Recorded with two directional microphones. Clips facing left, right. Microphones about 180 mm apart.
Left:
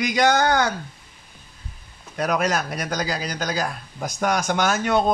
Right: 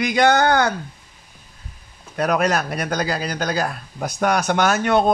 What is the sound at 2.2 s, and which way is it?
A man's voice, 55° right (ahead or behind).